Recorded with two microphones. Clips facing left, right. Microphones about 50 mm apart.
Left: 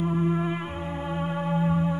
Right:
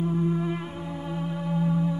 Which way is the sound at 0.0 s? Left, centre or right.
Left.